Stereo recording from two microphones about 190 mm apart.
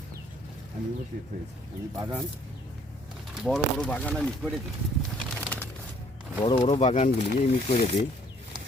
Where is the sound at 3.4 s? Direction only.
Centre (ahead or behind).